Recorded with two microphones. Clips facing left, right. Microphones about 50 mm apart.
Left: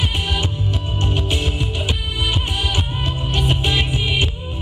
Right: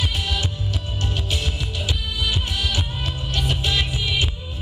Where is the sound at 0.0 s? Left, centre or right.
Left.